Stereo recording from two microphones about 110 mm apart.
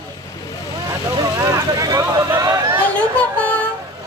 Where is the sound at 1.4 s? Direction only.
30° right (ahead or behind).